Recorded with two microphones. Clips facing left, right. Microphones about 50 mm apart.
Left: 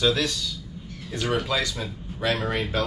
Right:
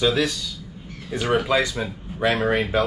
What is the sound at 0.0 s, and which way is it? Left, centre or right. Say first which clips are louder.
Speech: right 2 dB; centre.